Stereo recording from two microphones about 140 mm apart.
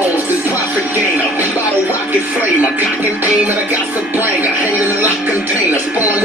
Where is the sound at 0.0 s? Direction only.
10° right (ahead or behind).